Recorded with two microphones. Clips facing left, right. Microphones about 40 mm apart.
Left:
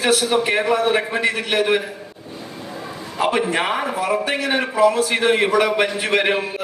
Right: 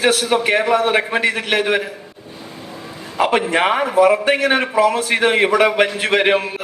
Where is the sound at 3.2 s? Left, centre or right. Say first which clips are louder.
Right 3 dB; right.